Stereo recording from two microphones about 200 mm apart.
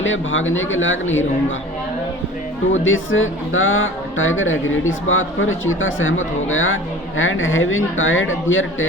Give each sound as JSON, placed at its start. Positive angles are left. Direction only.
{"t": 0.0, "sound": "speech", "side_deg": 75}
{"t": 2.7, "sound": "speech", "side_deg": 75}